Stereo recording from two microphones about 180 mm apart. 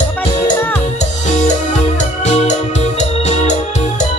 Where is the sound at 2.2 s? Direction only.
40° left (ahead or behind).